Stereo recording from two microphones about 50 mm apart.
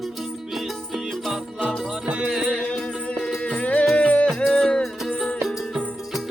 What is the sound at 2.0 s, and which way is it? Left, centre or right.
Music, centre.